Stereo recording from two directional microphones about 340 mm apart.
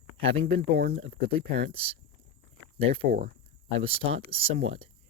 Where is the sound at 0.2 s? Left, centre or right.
Right.